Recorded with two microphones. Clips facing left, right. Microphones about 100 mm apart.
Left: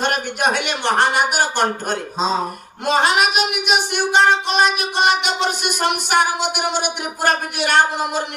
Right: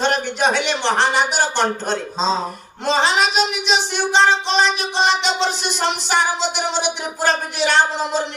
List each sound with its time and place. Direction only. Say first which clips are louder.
0.0 s speech: right 1 dB; 50° left (ahead or behind)